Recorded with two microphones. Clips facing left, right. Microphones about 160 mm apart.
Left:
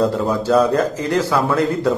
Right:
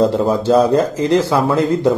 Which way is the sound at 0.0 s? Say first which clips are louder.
Right 4 dB; 25° right (ahead or behind).